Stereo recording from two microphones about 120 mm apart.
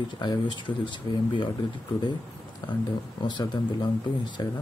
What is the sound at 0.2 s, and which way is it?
Speech, 40° left (ahead or behind).